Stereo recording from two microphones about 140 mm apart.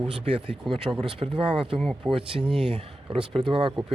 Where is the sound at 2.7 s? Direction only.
40° right (ahead or behind).